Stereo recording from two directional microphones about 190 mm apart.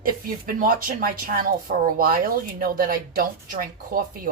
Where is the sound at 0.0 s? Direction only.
50° right (ahead or behind).